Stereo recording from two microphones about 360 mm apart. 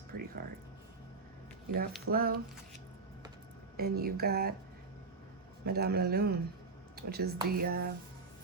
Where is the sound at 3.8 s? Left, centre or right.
Right.